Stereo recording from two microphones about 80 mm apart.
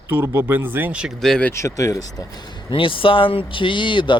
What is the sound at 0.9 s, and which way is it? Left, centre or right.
Speech, centre.